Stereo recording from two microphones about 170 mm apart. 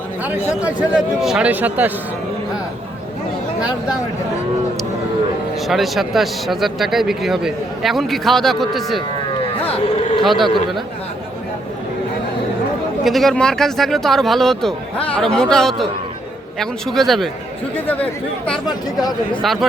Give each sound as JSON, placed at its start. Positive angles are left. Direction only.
{"t": 0.6, "sound": "a man's voice", "side_deg": -5}
{"t": 5.6, "sound": "speech", "side_deg": 0}
{"t": 9.6, "sound": "speech", "side_deg": 35}
{"t": 10.2, "sound": "speech", "side_deg": 0}
{"t": 13.1, "sound": "speech", "side_deg": 0}